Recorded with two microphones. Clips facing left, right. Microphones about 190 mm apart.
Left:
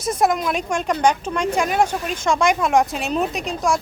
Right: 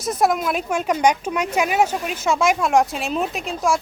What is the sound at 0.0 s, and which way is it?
A woman's voice, centre (ahead or behind).